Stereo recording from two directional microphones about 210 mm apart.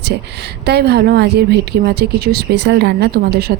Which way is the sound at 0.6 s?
50° right (ahead or behind).